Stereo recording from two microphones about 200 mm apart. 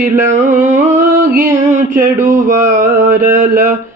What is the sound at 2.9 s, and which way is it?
Mantra, 10° right (ahead or behind).